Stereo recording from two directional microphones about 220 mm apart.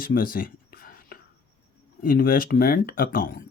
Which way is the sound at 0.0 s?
40° left (ahead or behind).